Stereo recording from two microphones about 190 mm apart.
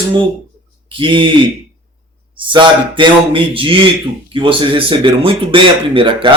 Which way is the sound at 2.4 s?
25° right (ahead or behind).